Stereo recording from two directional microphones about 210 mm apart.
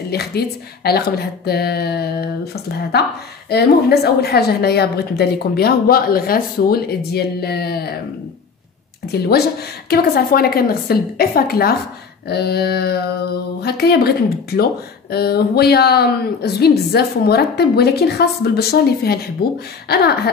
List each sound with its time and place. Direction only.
0.1 s speech: 50° left (ahead or behind)
9.0 s speech: 50° left (ahead or behind)